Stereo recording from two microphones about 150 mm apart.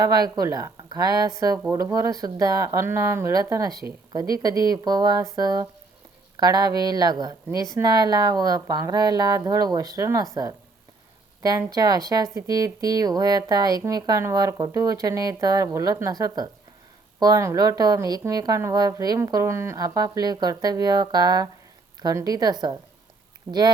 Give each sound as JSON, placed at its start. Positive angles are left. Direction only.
{"t": 0.0, "sound": "speech", "side_deg": -25}
{"t": 11.7, "sound": "speech", "side_deg": -25}